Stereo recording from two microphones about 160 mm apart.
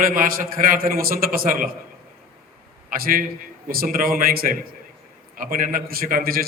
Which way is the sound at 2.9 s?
65° right (ahead or behind).